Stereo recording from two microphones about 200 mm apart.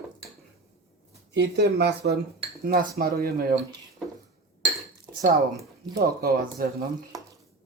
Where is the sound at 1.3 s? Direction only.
60° right (ahead or behind).